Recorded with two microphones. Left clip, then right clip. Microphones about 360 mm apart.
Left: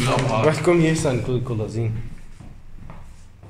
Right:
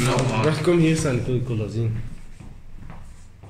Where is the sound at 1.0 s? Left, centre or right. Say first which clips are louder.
Left 2 dB; left.